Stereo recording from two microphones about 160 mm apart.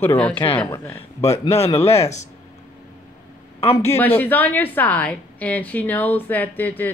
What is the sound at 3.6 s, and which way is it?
Speech, 40° left (ahead or behind).